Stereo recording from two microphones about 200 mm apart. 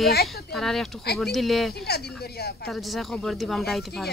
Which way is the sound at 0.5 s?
Centre (ahead or behind).